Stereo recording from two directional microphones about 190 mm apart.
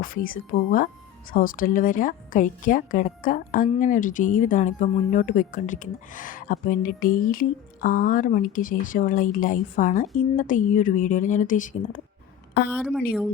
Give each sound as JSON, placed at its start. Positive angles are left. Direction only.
{"t": 0.0, "sound": "speech", "side_deg": 50}